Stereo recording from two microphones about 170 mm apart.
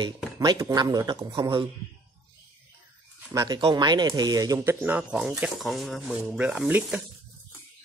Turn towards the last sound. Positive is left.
turn(degrees=-10)  # may be behind; listen again after turning